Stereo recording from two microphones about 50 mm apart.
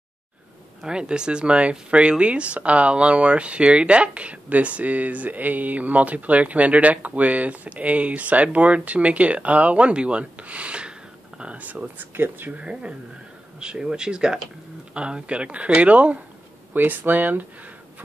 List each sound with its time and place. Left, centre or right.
0.8 s speech: centre; by 12.5 s right
12.5 s speech: right
16.7 s speech: right